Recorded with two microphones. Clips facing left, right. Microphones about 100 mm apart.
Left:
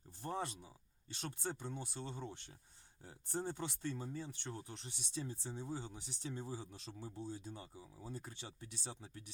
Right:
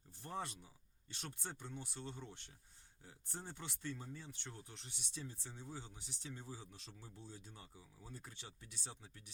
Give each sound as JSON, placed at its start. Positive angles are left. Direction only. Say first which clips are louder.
{"t": 0.2, "sound": "speech", "louder": "left 4 dB", "side_deg": 30}
{"t": 3.0, "sound": "speech", "louder": "left 9 dB", "side_deg": 40}